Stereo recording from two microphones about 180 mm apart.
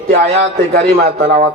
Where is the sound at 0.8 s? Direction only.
40° right (ahead or behind).